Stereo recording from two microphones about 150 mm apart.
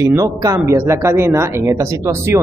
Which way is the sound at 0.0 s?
20° right (ahead or behind).